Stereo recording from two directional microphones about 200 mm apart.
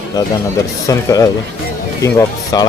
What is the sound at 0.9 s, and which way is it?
Speech, 15° left (ahead or behind).